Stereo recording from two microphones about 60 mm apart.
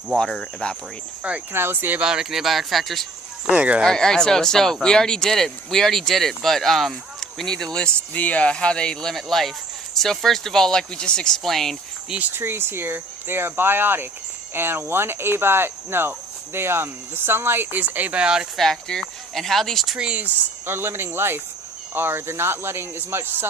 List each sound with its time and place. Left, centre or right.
0.2 s speech: centre
1.5 s cricket: right
2.0 s speech: centre
3.5 s speech: centre
3.8 s speech: centre
8.1 s speech: left; by 11.8 s centre
12.3 s cricket: right
18.2 s speech: centre
18.5 s speech: centre
20.0 s speech: right
20.7 s cricket: right